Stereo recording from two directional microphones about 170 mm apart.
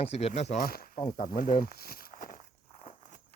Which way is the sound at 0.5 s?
60° left (ahead or behind).